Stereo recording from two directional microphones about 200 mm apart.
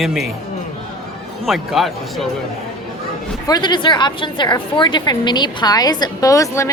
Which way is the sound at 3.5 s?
20° left (ahead or behind).